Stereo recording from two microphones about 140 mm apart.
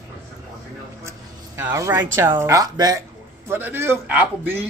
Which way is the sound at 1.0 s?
20° right (ahead or behind).